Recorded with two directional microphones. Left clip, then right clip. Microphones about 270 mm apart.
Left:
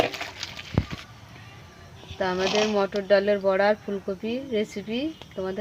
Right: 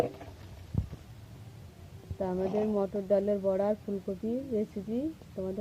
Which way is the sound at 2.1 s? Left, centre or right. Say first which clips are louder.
Left 8 dB; left.